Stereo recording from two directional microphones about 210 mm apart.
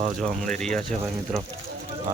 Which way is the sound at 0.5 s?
5° left (ahead or behind).